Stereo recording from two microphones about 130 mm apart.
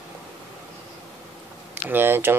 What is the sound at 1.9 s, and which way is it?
Speech, 15° right (ahead or behind).